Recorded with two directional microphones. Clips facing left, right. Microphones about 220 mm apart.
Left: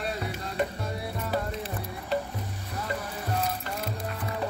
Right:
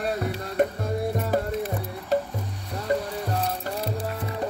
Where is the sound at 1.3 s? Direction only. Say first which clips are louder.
Right 6 dB; 45° right (ahead or behind).